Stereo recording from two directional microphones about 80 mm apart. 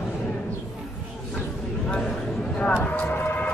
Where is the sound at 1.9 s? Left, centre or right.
Centre.